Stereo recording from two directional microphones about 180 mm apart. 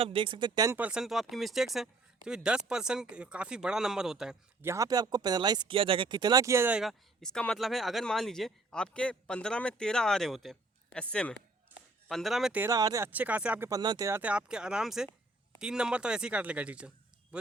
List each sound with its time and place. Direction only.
0.0 s speech: 30° right (ahead or behind)
0.8 s speech: 5° right (ahead or behind)
4.7 s speech: 20° right (ahead or behind); by 11.3 s 5° left (ahead or behind)
11.7 s a sound: 10° right (ahead or behind)
12.0 s speech: centre (ahead or behind)
12.6 s speech: 20° right (ahead or behind)
13.7 s speech: 20° right (ahead or behind)